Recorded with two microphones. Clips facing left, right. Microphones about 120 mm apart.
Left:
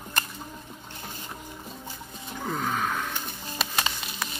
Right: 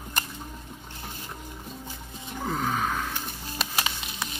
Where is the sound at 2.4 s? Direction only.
30° right (ahead or behind).